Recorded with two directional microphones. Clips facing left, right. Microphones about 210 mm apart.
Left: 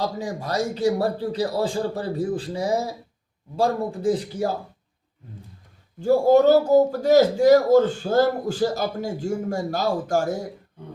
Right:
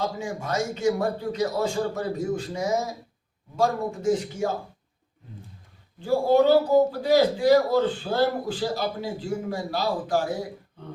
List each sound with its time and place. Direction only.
0.0 s a man's voice: 35° left (ahead or behind)
6.0 s a man's voice: 45° left (ahead or behind)